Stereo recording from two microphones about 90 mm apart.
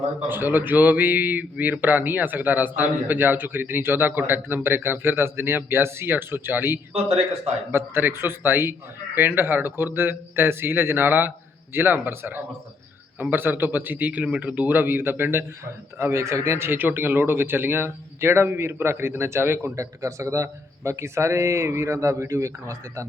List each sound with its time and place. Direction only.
0.3 s speech: 20° right (ahead or behind)